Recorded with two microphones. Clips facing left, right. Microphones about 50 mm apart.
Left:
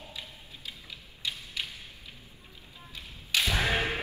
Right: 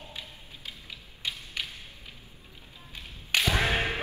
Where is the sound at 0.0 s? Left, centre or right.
Right.